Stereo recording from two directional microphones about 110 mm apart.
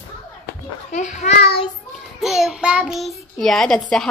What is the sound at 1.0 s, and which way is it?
Speech, 90° left.